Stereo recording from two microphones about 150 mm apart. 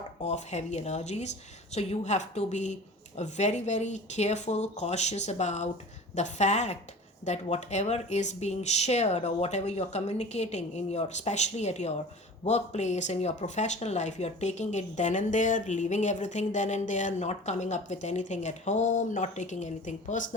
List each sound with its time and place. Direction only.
0.3 s speech: 50° left (ahead or behind)